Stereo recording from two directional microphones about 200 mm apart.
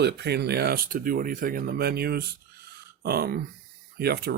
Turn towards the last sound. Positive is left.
turn(degrees=-50)  # may be behind; listen again after turning